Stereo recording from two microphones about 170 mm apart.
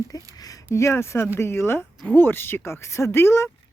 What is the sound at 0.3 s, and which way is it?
Speech, 20° left (ahead or behind).